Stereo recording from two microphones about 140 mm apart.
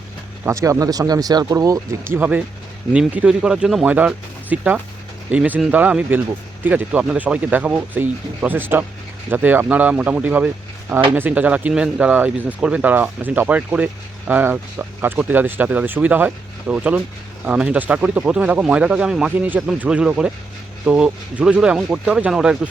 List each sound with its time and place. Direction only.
0.4 s speech: 20° right (ahead or behind); by 22.5 s 5° right (ahead or behind)